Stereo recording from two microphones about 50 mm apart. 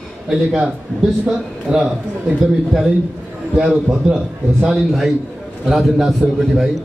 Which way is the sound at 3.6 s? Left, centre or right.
Centre.